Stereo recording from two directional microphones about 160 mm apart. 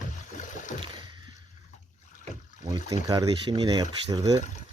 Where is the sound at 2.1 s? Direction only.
50° left (ahead or behind).